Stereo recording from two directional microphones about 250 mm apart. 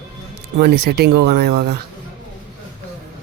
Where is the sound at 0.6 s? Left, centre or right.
Right.